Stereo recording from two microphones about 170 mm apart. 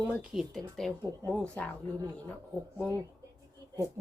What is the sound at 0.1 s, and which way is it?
Speech, 5° right (ahead or behind).